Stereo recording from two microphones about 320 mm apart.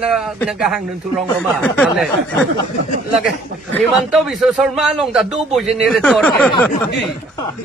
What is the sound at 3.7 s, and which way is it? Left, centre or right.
A man's voice, centre.